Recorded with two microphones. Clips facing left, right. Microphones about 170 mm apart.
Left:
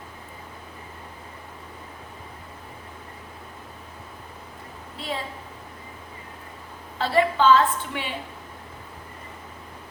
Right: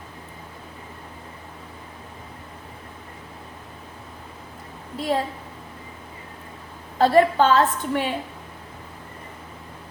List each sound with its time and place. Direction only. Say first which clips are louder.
4.9 s a woman's voice: right 8 dB; 45° right (ahead or behind)
7.0 s a woman's voice: right 4 dB; 45° right (ahead or behind)